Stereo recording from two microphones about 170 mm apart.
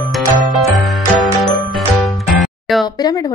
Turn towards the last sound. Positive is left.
turn(degrees=25)  # may be behind; listen again after turning